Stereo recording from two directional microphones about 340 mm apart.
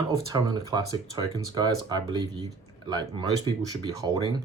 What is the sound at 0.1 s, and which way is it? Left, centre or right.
Speech, centre.